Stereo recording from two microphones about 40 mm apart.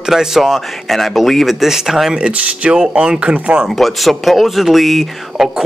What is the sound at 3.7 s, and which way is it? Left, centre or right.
Speech, centre.